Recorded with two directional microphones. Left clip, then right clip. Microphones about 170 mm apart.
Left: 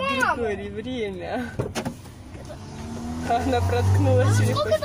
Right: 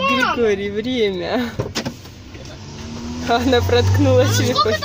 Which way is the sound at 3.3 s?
50° right (ahead or behind).